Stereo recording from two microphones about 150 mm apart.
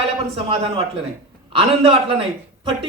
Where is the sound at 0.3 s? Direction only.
40° right (ahead or behind).